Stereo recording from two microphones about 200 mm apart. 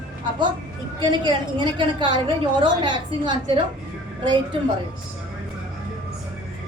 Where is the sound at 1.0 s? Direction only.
20° right (ahead or behind).